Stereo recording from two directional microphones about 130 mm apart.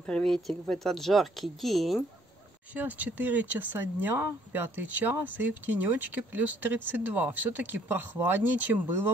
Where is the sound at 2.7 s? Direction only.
10° right (ahead or behind).